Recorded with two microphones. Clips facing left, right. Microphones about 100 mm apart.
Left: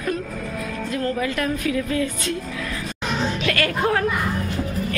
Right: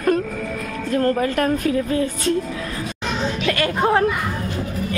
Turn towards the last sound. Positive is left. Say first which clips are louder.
# right 3 dB
turn(degrees=-25)  # may be behind; listen again after turning